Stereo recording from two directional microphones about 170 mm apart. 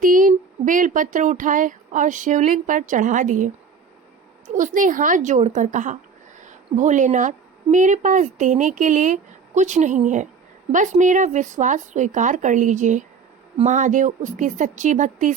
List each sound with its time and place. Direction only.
0.0 s speech: 50° right (ahead or behind)
4.5 s a woman's voice: 50° right (ahead or behind)